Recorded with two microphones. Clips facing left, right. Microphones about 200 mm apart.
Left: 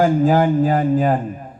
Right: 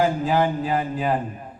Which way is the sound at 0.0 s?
45° left (ahead or behind).